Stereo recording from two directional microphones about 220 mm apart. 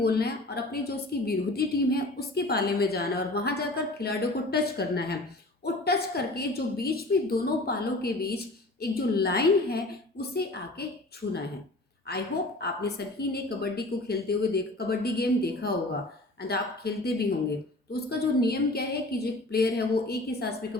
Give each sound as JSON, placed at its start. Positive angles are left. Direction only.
{"t": 0.0, "sound": "a woman's voice", "side_deg": 45}
{"t": 12.1, "sound": "a woman's voice", "side_deg": 45}